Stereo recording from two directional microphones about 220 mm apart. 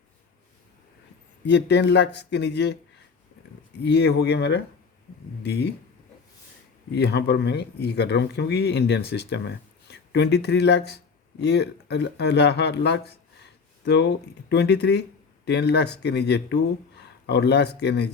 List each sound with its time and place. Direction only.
1.5 s speech: 50° left (ahead or behind)
3.8 s speech: 50° left (ahead or behind)
6.9 s speech: 50° left (ahead or behind)